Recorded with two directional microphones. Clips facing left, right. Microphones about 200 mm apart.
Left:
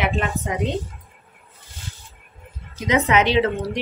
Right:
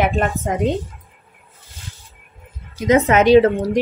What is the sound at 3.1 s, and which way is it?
Speech, 50° right (ahead or behind).